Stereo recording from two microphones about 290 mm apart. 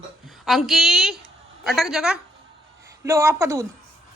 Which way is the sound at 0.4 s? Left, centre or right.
Centre.